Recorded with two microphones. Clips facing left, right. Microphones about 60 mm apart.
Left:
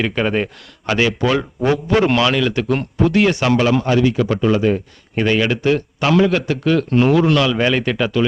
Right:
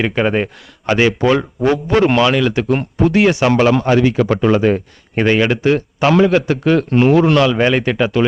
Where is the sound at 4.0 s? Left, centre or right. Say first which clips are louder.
Right 2 dB; right.